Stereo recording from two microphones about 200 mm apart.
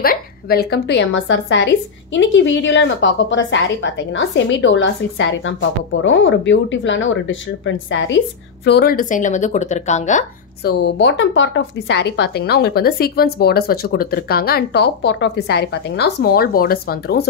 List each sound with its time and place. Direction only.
0.0 s a woman's voice: 50° left (ahead or behind); by 8.2 s 70° left (ahead or behind)
8.6 s speech: 50° left (ahead or behind); by 10.2 s 35° left (ahead or behind)
10.6 s speech: 55° left (ahead or behind)